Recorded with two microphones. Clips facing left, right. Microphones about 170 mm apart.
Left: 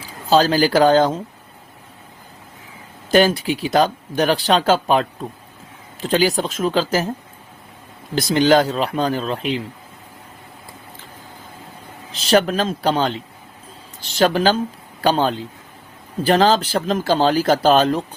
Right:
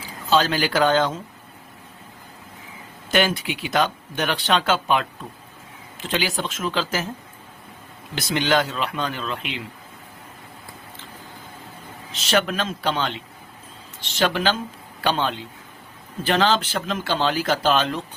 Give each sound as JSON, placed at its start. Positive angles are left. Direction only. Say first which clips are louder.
{"t": 0.3, "sound": "speech", "louder": "left 5 dB", "side_deg": 35}
{"t": 3.1, "sound": "speech", "louder": "left 6 dB", "side_deg": 35}
{"t": 8.1, "sound": "speech", "louder": "left 7 dB", "side_deg": 35}
{"t": 12.1, "sound": "speech", "louder": "left 6 dB", "side_deg": 35}